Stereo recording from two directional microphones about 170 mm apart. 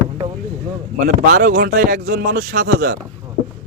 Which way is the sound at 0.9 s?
60° right (ahead or behind).